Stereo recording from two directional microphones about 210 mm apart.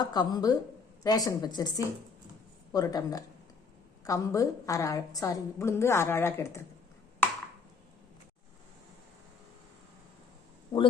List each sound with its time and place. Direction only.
0.0 s a woman's voice: 20° left (ahead or behind)
2.7 s a woman's voice: 20° left (ahead or behind)
10.7 s a woman's voice: 25° left (ahead or behind)